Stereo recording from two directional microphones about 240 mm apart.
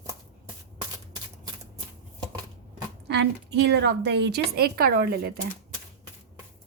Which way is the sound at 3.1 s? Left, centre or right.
Right.